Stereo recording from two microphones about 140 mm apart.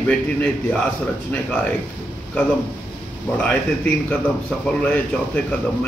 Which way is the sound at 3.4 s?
10° left (ahead or behind).